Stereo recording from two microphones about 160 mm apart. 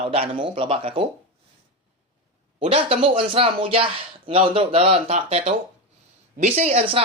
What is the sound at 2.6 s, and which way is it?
Speech, 35° right (ahead or behind).